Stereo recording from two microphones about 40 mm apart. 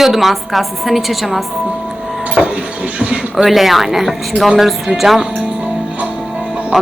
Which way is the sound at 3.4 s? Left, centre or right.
Centre.